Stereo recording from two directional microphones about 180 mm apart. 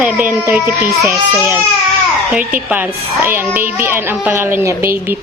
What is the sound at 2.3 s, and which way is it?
A woman's voice, 10° right (ahead or behind).